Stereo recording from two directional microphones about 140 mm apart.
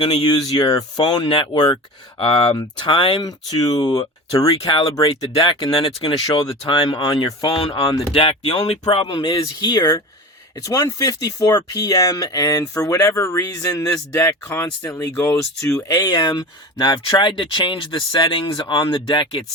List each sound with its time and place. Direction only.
0.0 s speech: 35° left (ahead or behind)